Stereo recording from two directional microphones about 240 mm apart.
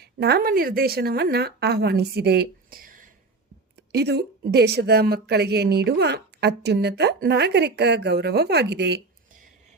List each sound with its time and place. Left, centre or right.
0.0 s a woman's voice: right